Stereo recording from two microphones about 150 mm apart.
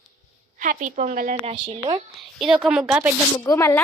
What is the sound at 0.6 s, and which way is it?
Speech, 60° right (ahead or behind).